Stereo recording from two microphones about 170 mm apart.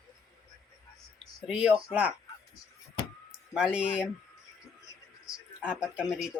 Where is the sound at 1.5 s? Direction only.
5° right (ahead or behind).